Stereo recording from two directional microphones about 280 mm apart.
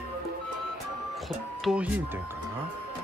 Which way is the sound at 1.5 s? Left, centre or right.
Centre.